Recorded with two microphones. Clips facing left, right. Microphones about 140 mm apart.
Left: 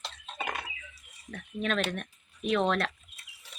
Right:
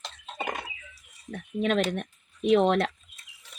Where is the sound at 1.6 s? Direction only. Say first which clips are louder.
Right 5 dB; 25° right (ahead or behind).